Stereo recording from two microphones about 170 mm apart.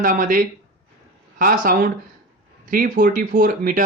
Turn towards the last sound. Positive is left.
turn(degrees=-55)  # may be behind; listen again after turning